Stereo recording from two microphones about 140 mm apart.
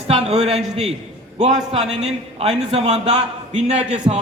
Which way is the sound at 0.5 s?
5° right (ahead or behind).